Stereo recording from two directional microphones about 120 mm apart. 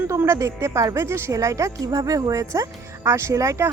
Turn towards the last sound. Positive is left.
turn(degrees=-25)  # may be behind; listen again after turning